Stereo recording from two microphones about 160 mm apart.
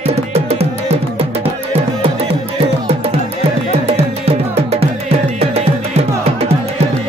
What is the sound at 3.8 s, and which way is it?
Music, 40° right (ahead or behind).